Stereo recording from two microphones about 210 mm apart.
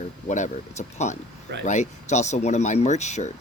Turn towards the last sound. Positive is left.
turn(degrees=35)  # may be behind; listen again after turning